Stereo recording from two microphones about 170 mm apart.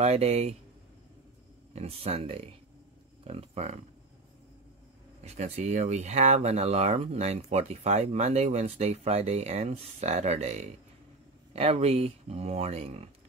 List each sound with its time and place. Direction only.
0.0 s speech: 40° right (ahead or behind)
1.7 s speech: 35° right (ahead or behind)
5.2 s speech: 40° right (ahead or behind)